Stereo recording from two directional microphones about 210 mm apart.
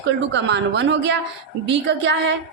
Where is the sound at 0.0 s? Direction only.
55° right (ahead or behind).